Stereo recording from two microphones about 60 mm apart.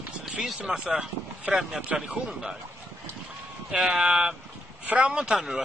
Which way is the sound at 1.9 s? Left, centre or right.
Centre.